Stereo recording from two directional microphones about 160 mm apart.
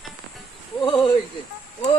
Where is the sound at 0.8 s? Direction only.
25° left (ahead or behind).